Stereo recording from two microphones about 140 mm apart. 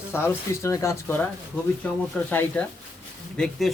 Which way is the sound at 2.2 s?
10° left (ahead or behind).